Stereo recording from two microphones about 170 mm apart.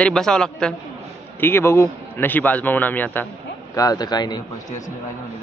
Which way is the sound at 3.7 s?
20° left (ahead or behind).